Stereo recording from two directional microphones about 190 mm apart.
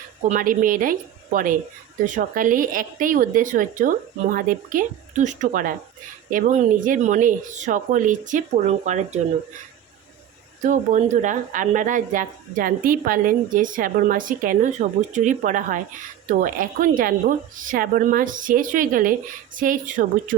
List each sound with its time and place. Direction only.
0.3 s speech: 45° right (ahead or behind)
10.6 s speech: 40° right (ahead or behind)